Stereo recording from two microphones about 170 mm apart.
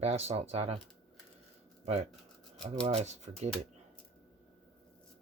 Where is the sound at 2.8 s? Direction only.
40° right (ahead or behind).